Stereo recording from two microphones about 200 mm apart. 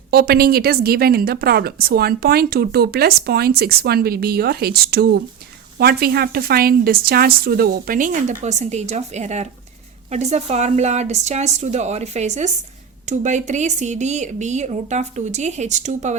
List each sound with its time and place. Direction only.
0.1 s a woman's voice: 50° right (ahead or behind)